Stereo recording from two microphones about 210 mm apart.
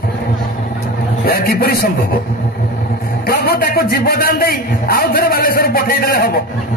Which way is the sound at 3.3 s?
45° left (ahead or behind).